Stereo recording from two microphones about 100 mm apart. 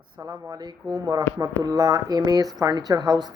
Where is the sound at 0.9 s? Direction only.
45° right (ahead or behind).